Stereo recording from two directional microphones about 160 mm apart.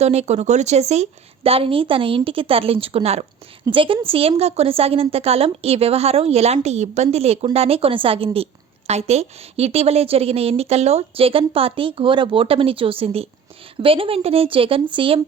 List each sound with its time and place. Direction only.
0.0 s a woman's voice: 40° right (ahead or behind)